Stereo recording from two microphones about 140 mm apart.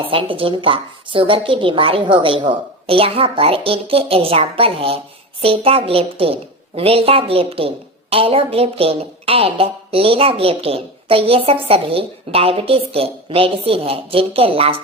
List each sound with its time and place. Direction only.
0.1 s a woman's voice: 40° right (ahead or behind)